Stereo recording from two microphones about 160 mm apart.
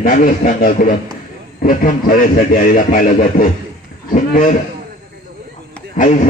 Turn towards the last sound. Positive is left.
turn(degrees=55)  # may be behind; listen again after turning